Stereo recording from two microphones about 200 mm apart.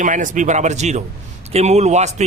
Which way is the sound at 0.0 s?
40° right (ahead or behind).